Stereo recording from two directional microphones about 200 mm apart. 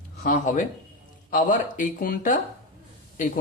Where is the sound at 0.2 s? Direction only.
40° left (ahead or behind).